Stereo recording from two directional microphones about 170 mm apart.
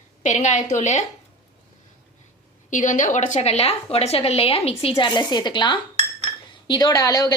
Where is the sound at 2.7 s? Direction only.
50° left (ahead or behind).